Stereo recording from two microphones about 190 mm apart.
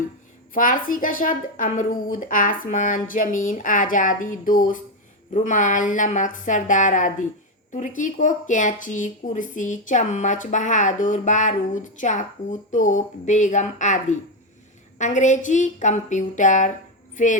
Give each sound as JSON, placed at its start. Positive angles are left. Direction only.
{"t": 0.5, "sound": "speech", "side_deg": 45}